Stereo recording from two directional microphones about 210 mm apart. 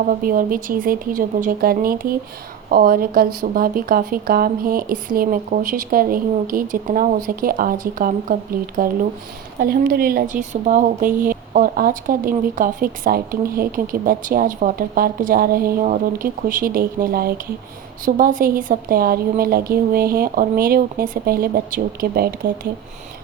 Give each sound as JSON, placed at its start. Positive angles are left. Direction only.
{"t": 0.1, "sound": "speech", "side_deg": -40}